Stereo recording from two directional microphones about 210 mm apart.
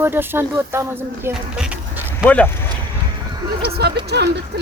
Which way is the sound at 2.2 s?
5° left (ahead or behind).